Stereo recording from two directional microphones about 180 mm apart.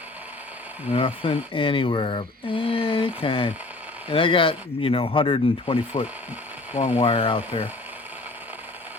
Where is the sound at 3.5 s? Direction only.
10° right (ahead or behind).